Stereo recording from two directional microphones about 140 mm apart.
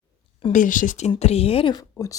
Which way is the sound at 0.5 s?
70° left (ahead or behind).